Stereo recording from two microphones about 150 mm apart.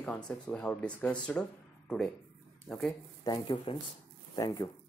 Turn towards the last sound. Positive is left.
turn(degrees=25)  # may be behind; listen again after turning